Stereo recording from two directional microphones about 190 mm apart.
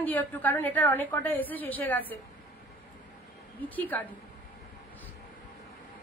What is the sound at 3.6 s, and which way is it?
Speech, 10° left (ahead or behind).